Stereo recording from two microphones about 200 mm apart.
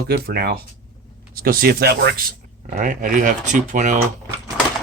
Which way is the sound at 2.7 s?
40° right (ahead or behind).